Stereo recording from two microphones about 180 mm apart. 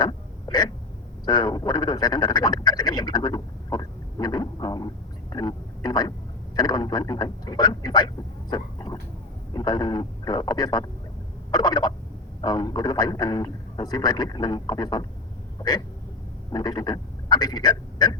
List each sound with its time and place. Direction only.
0.0 s a sound: 25° left (ahead or behind)
1.2 s speech: 25° left (ahead or behind)
16.5 s speech: 25° left (ahead or behind)